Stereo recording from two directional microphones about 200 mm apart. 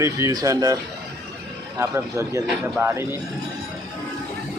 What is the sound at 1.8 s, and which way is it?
Speech, 15° right (ahead or behind).